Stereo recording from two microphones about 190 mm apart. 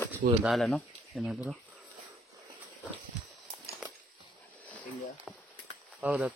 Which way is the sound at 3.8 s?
5° right (ahead or behind).